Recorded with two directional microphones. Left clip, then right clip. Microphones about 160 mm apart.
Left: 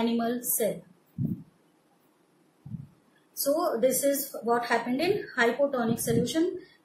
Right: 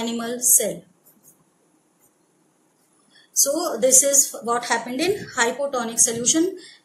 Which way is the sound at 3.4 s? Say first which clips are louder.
Right 4 dB; 55° right (ahead or behind).